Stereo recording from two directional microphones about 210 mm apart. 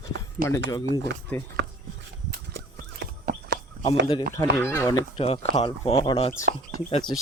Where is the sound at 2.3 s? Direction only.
50° right (ahead or behind).